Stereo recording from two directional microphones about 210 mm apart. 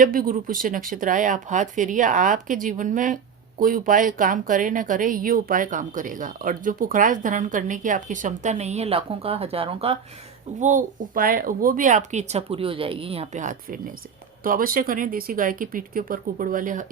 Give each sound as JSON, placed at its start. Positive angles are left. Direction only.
{"t": 0.0, "sound": "speech", "side_deg": -40}
{"t": 10.6, "sound": "speech", "side_deg": -40}